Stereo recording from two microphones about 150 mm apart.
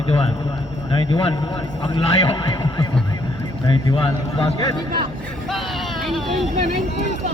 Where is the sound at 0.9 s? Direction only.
30° left (ahead or behind).